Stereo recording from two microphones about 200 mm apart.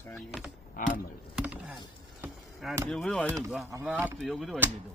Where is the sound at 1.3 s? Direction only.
5° right (ahead or behind).